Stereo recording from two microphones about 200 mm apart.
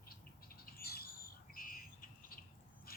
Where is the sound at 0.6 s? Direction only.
50° left (ahead or behind).